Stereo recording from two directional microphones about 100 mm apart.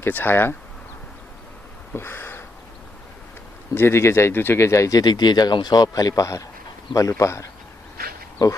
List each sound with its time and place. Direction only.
0.0 s speech: 20° left (ahead or behind)
1.9 s a sound: 25° left (ahead or behind)
3.8 s speech: 25° left (ahead or behind)